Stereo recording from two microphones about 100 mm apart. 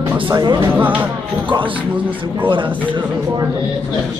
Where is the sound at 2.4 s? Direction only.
55° right (ahead or behind).